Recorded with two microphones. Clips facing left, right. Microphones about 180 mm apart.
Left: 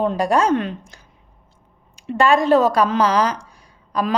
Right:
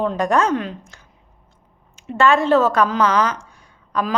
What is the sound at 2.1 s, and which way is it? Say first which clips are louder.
Speech: left 1 dB; 15° left (ahead or behind).